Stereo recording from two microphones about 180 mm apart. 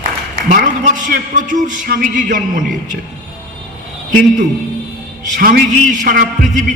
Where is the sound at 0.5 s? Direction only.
50° right (ahead or behind).